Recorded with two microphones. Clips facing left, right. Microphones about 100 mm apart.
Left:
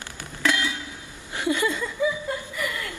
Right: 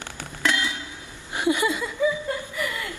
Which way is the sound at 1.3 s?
20° right (ahead or behind).